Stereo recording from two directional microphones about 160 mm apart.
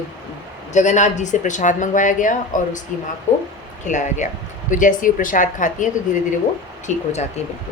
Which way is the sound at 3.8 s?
50° left (ahead or behind).